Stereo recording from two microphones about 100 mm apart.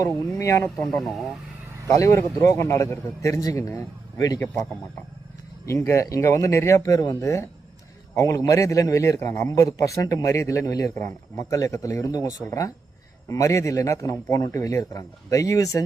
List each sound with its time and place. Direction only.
0.3 s a man's voice: 30° left (ahead or behind)
0.9 s speech: centre (ahead or behind)
1.9 s a man's voice: 30° left (ahead or behind)
5.6 s a man's voice: 30° left (ahead or behind)